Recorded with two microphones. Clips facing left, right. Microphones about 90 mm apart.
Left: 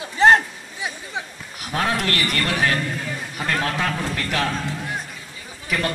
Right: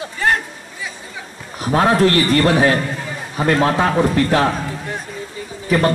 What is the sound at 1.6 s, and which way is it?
A man's voice, 35° right (ahead or behind).